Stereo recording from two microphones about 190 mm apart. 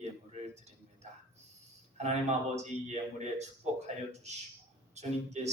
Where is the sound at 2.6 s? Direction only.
35° right (ahead or behind).